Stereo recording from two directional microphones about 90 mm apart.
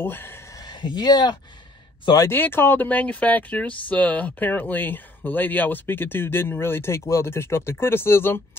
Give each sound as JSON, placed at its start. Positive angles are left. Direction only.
{"t": 0.0, "sound": "speech", "side_deg": 25}
{"t": 0.6, "sound": "speech", "side_deg": 55}
{"t": 2.1, "sound": "speech", "side_deg": 25}